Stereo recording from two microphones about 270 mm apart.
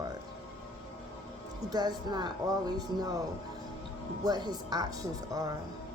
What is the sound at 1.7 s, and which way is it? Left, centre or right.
A woman's voice, centre.